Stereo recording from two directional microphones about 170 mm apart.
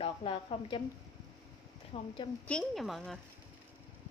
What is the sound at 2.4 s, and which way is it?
Speech, 5° left (ahead or behind).